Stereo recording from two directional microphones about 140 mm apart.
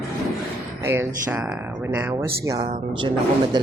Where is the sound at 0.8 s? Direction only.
15° right (ahead or behind); by 3.1 s 35° right (ahead or behind).